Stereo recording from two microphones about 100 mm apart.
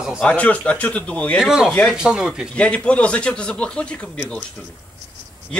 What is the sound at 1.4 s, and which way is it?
Speech, 5° right (ahead or behind).